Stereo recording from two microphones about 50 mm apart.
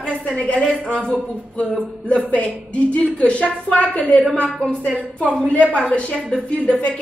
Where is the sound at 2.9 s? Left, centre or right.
Left.